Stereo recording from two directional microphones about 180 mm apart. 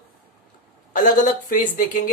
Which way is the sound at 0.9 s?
45° left (ahead or behind).